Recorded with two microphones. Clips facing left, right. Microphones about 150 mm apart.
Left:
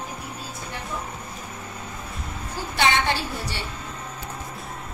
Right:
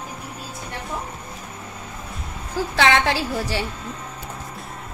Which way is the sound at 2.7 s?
90° right.